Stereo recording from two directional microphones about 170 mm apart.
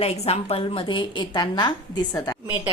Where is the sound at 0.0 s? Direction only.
35° left (ahead or behind).